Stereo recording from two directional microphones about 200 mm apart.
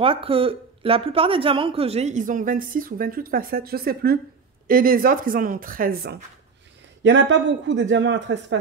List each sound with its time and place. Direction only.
0.0 s speech: 25° right (ahead or behind); by 6.1 s 50° right (ahead or behind)
7.0 s a man's voice: 65° right (ahead or behind)